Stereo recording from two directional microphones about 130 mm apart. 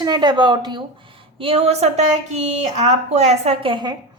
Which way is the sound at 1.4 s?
45° right (ahead or behind).